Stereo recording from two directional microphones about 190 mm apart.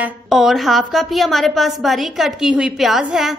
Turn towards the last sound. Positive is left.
turn(degrees=-5)  # may be behind; listen again after turning